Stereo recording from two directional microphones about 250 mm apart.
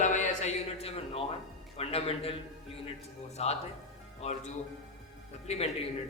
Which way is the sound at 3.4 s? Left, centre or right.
Left.